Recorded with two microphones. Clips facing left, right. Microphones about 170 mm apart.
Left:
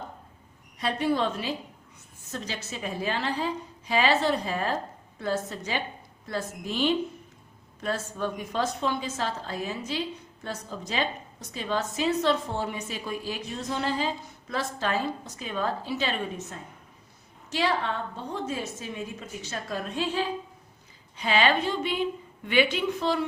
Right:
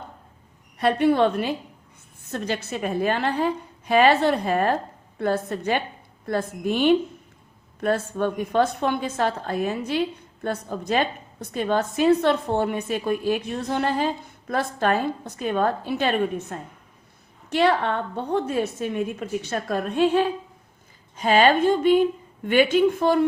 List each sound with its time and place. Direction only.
0.8 s a woman's voice: 60° right (ahead or behind)
21.2 s a woman's voice: 45° right (ahead or behind)